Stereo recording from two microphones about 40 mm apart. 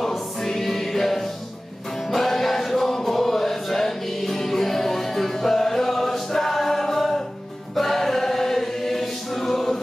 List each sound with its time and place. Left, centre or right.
0.4 s music: centre
7.7 s choir: centre